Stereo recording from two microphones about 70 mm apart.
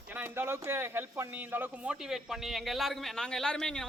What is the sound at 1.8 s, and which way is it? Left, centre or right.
A man's voice, centre.